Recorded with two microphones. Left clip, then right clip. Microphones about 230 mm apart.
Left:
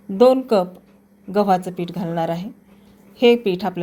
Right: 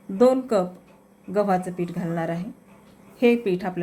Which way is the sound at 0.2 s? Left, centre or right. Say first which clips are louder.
Left 5 dB; centre.